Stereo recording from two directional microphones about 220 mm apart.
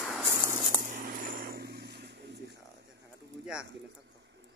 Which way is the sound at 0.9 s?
35° right (ahead or behind).